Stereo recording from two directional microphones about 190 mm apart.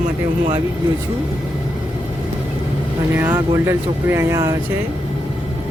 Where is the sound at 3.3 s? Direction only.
15° right (ahead or behind).